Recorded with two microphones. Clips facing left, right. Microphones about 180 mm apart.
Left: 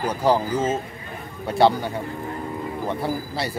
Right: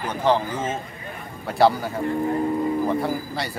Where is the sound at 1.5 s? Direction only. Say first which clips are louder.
Even; centre (ahead or behind).